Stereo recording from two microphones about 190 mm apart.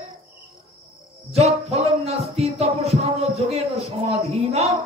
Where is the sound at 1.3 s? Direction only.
35° right (ahead or behind).